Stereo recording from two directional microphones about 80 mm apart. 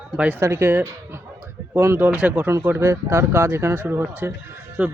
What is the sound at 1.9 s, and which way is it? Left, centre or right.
Speech, right.